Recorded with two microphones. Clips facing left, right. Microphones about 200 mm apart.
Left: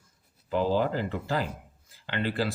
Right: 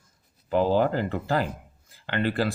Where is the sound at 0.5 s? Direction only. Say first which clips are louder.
Right 4 dB; 55° right (ahead or behind).